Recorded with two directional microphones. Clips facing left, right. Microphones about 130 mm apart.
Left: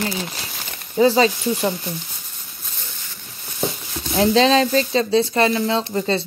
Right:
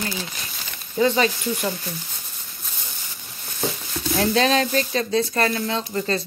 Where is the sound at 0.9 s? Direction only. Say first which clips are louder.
Left 4 dB; 30° left (ahead or behind).